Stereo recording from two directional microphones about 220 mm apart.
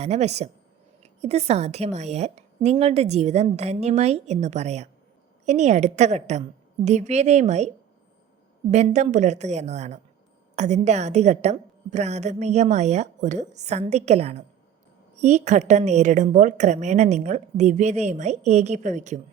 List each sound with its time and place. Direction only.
0.0 s a woman's voice: 30° right (ahead or behind)
8.7 s a woman's voice: 30° right (ahead or behind)